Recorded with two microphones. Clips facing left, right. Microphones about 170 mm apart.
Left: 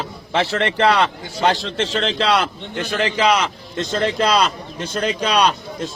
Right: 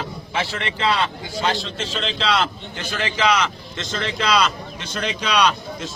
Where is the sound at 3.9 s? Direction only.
45° left (ahead or behind).